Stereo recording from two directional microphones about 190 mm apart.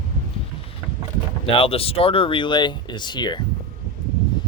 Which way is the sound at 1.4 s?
30° left (ahead or behind).